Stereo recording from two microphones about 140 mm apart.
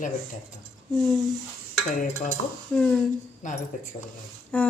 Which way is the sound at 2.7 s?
5° left (ahead or behind).